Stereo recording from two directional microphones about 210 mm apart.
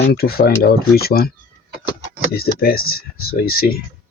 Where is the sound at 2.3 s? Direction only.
45° left (ahead or behind).